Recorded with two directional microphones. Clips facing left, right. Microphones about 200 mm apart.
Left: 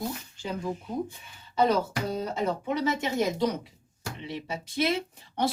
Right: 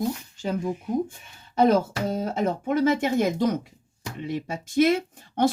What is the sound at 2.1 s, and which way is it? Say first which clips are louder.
Speech: right 3 dB; 45° right (ahead or behind).